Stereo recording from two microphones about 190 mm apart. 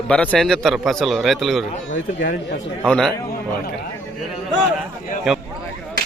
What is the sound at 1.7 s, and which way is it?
Speech, 45° left (ahead or behind).